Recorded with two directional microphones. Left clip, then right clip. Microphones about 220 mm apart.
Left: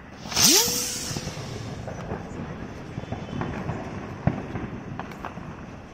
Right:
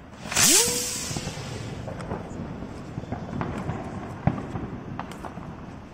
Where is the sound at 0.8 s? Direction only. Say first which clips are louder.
Left 1 dB; 20° right (ahead or behind).